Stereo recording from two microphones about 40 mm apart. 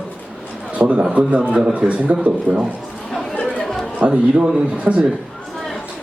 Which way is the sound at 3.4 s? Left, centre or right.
Centre.